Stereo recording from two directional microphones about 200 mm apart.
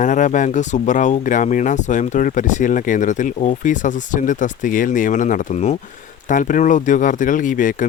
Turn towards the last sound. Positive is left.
turn(degrees=40)  # may be behind; listen again after turning